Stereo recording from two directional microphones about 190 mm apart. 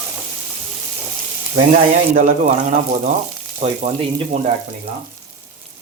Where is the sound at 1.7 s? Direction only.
40° right (ahead or behind).